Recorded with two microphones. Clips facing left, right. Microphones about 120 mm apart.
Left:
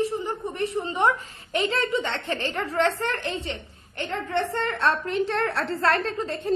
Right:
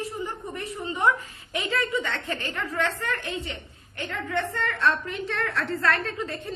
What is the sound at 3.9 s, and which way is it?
A woman's voice, 30° left (ahead or behind).